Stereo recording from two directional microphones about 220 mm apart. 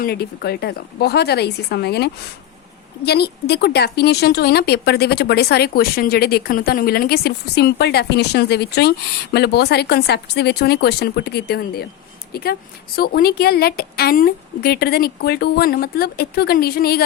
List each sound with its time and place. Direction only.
0.0 s a woman's voice: 45° left (ahead or behind)